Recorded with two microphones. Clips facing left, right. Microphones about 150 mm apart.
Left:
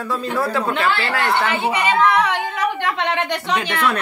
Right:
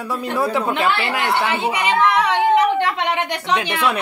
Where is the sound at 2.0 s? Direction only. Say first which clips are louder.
Right 3 dB; 25° right (ahead or behind).